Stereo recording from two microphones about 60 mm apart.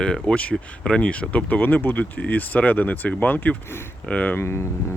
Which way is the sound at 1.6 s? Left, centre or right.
Left.